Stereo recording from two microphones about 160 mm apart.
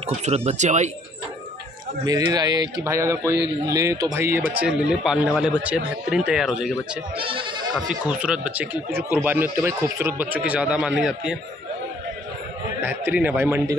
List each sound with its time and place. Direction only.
0.2 s speech: 45° right (ahead or behind)
2.0 s a man's voice: 25° right (ahead or behind)
4.6 s a man's voice: 5° right (ahead or behind)
7.2 s speech: 35° right (ahead or behind)
7.7 s speech: 5° right (ahead or behind)
12.8 s speech: 10° right (ahead or behind)